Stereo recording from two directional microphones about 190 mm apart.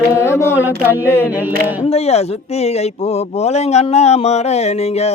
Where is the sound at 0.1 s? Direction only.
15° left (ahead or behind).